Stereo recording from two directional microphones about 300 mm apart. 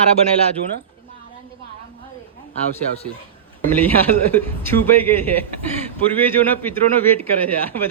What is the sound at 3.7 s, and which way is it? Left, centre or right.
A man's voice, centre.